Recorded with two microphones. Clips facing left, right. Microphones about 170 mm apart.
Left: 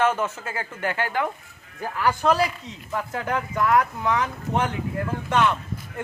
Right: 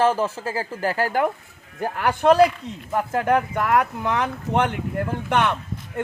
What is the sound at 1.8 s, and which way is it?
A man's voice, 55° right (ahead or behind).